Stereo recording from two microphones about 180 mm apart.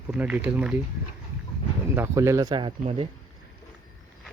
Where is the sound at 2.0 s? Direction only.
15° right (ahead or behind).